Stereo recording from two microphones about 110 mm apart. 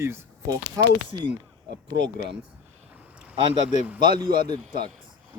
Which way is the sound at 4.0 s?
45° right (ahead or behind).